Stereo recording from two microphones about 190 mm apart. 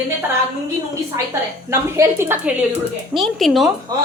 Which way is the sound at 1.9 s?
15° right (ahead or behind).